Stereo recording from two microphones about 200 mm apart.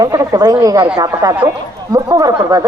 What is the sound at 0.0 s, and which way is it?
Speech, 15° right (ahead or behind).